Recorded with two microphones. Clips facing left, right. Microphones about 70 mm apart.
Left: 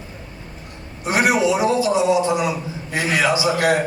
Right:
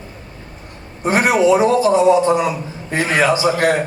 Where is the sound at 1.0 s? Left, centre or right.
Right.